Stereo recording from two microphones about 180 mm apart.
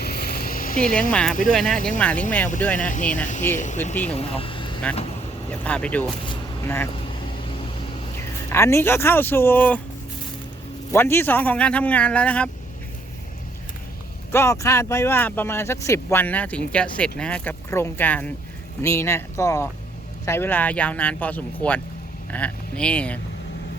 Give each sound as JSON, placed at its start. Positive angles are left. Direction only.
{"t": 0.0, "sound": "a sound", "side_deg": 60}
{"t": 1.1, "sound": "speech", "side_deg": 5}
{"t": 2.9, "sound": "speech", "side_deg": 45}
{"t": 4.1, "sound": "speech", "side_deg": 30}
{"t": 5.5, "sound": "speech", "side_deg": 5}
{"t": 6.2, "sound": "vehicle", "side_deg": 15}
{"t": 6.9, "sound": "a sound", "side_deg": 30}
{"t": 8.1, "sound": "speech", "side_deg": 15}
{"t": 10.9, "sound": "speech", "side_deg": 15}
{"t": 14.3, "sound": "speech", "side_deg": 15}